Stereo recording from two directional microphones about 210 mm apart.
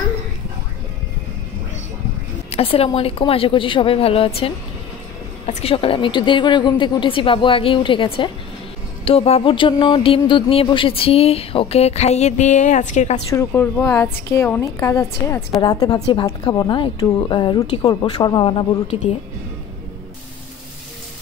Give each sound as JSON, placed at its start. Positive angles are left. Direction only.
{"t": 2.5, "sound": "speech", "side_deg": 25}
{"t": 13.3, "sound": "a woman's voice", "side_deg": 10}